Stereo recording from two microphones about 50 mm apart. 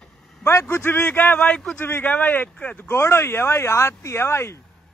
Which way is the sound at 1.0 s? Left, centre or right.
Left.